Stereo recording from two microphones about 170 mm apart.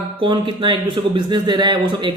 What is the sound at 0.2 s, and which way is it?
Speech, 30° right (ahead or behind).